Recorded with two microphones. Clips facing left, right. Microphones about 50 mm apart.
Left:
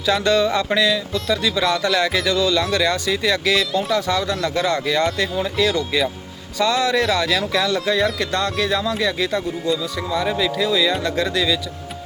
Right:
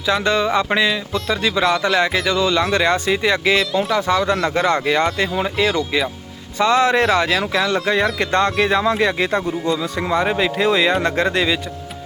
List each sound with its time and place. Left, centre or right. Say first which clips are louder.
0.0 s speech: even; centre
6.6 s speech: right 3 dB; right